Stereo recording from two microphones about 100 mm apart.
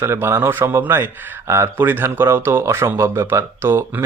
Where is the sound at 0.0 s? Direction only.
25° right (ahead or behind).